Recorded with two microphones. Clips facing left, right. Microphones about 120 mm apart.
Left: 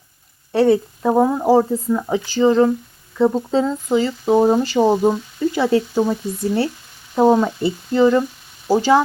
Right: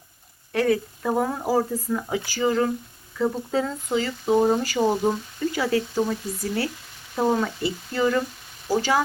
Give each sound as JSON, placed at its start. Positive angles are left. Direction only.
{"t": 0.5, "sound": "speech", "side_deg": 30}